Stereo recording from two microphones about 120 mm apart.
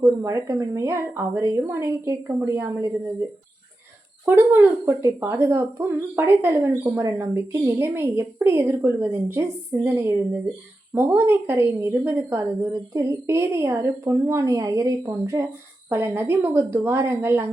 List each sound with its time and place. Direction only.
0.0 s speech: 25° right (ahead or behind)
4.3 s speech: 15° right (ahead or behind)